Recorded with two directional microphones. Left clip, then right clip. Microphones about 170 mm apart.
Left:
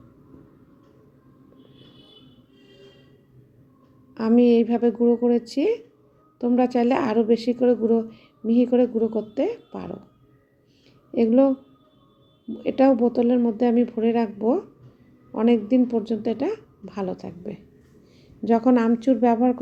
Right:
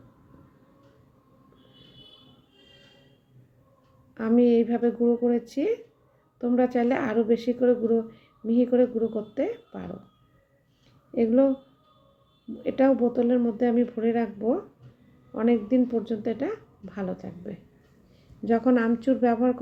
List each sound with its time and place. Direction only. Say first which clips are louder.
4.1 s a woman's voice: left 3 dB; 20° left (ahead or behind)
11.1 s a woman's voice: left 3 dB; 25° left (ahead or behind)
12.6 s a woman's voice: left 3 dB; 20° left (ahead or behind)